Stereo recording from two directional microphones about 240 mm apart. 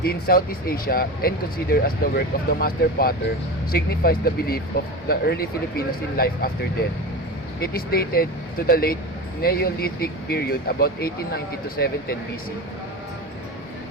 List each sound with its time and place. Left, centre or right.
0.0 s speech: left
7.6 s speech: left